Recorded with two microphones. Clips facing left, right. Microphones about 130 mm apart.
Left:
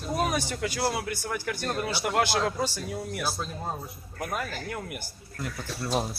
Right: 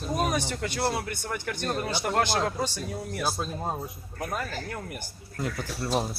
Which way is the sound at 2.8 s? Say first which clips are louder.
Even; 20° right (ahead or behind).